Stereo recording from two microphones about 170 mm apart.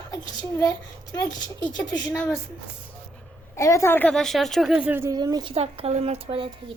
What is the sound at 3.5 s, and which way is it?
Speech, 15° left (ahead or behind).